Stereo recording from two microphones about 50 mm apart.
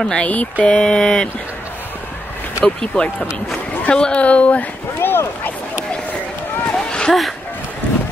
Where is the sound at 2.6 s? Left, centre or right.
Centre.